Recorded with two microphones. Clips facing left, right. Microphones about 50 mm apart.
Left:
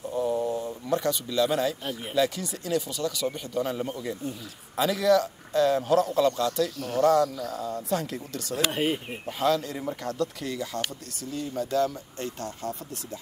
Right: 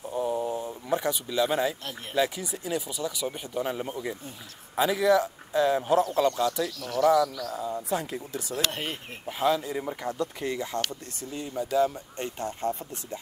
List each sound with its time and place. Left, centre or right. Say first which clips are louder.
0.1 s a sound: left 1 dB; centre
0.8 s speech: left 1 dB; centre
6.8 s speech: even; left
7.5 s speech: left 1 dB; centre
8.5 s speech: left 6 dB; centre
9.4 s speech: even; centre